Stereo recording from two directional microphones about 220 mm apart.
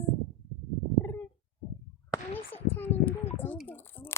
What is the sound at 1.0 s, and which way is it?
Cat, 10° left (ahead or behind).